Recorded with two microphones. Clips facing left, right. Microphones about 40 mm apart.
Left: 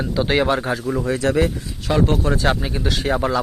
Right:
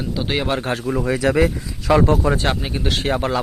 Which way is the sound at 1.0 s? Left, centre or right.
Right.